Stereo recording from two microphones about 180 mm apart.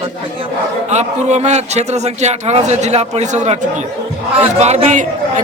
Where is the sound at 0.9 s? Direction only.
40° right (ahead or behind).